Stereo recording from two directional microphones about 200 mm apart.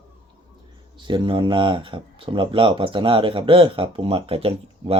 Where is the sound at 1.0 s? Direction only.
25° right (ahead or behind).